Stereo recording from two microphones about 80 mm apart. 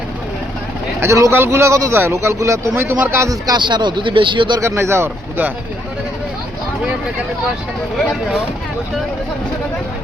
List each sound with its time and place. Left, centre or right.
1.0 s speech: right
1.3 s a man's voice: right
2.7 s a man's voice: right
3.4 s speech: right
4.6 s a man's voice: right